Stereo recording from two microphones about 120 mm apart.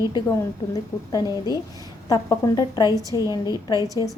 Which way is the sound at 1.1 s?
30° left (ahead or behind).